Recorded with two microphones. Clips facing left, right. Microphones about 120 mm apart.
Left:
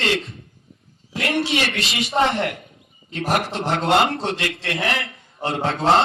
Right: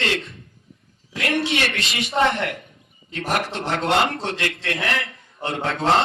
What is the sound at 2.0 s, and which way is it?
A man's voice, 40° left (ahead or behind).